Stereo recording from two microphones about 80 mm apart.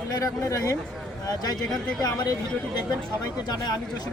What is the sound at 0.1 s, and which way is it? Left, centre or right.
Speech, left.